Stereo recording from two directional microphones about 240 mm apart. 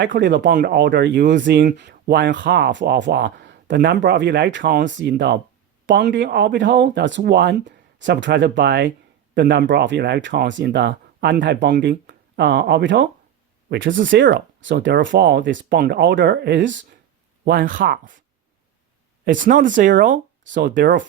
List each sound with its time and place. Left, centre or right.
0.2 s speech: right
17.4 s speech: right
19.2 s speech: right
20.7 s speech: right